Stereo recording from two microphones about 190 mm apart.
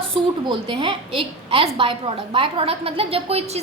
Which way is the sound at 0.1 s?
30° right (ahead or behind).